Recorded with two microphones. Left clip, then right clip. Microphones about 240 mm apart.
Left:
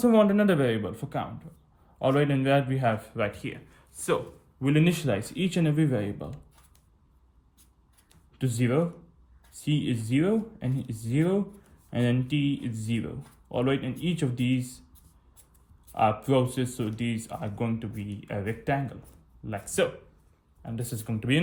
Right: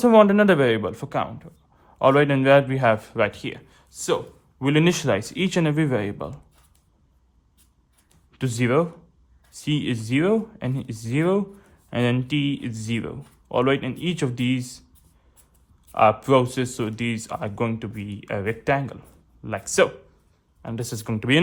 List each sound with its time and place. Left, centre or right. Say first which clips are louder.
0.0 s speech: right 7 dB; centre
4.6 s speech: right 6 dB; centre
8.5 s speech: right 6 dB; right
15.9 s speech: right 7 dB; right